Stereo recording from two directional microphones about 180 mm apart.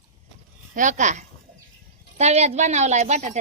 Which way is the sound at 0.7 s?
45° right (ahead or behind).